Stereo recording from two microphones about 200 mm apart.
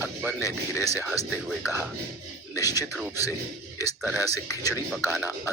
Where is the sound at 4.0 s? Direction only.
10° right (ahead or behind).